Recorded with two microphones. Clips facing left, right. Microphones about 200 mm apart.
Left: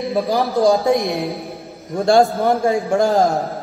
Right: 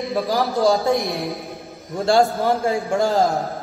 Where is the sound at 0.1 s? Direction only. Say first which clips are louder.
Left 3 dB; 15° left (ahead or behind).